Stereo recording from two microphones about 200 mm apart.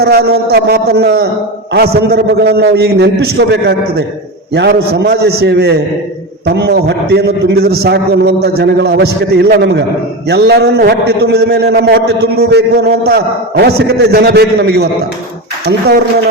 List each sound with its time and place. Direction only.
0.0 s a man's voice: 50° right (ahead or behind)